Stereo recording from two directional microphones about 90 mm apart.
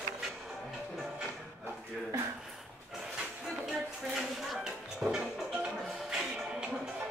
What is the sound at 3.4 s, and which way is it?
Music, centre (ahead or behind).